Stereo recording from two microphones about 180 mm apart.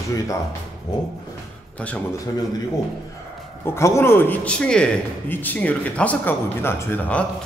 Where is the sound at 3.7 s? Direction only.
15° left (ahead or behind).